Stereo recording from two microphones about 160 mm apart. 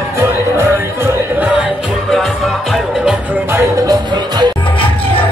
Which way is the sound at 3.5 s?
25° right (ahead or behind).